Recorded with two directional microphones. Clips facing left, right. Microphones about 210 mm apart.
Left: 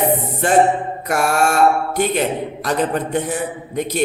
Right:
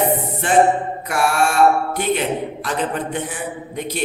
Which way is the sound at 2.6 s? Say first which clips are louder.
Left 6 dB; 40° left (ahead or behind).